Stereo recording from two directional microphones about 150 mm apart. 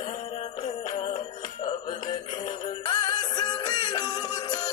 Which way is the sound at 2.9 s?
30° left (ahead or behind).